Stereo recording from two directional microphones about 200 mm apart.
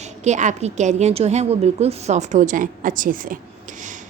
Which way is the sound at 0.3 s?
35° right (ahead or behind).